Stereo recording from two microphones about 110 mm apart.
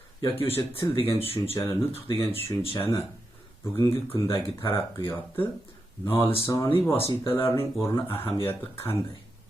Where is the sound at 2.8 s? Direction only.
25° left (ahead or behind).